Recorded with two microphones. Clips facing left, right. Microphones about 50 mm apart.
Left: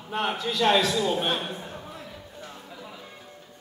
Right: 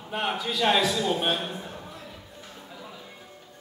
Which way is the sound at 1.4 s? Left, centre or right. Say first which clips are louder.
Even; centre.